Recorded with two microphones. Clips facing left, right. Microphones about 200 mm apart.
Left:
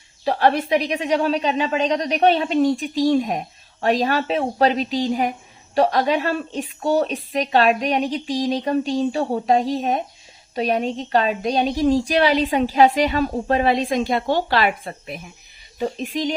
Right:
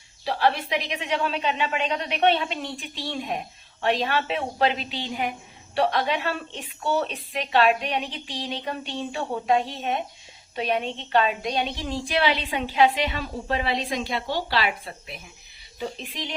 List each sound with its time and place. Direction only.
0.3 s a woman's voice: 45° left (ahead or behind)